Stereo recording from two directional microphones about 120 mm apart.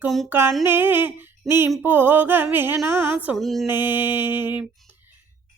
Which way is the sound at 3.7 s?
20° right (ahead or behind).